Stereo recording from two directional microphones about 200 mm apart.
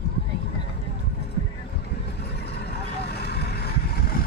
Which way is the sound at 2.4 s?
55° left (ahead or behind).